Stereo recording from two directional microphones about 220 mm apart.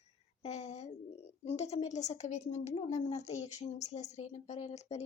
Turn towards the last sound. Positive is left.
turn(degrees=30)  # may be behind; listen again after turning